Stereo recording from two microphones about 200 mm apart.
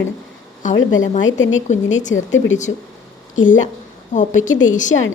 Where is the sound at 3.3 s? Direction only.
40° left (ahead or behind).